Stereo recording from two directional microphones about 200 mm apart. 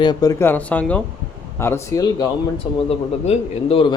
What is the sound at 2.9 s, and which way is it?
Speech, 30° left (ahead or behind).